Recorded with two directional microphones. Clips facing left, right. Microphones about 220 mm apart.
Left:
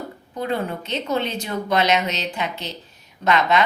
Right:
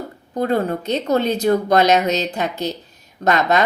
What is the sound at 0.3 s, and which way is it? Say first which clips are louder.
Speech: right 6 dB; 40° right (ahead or behind).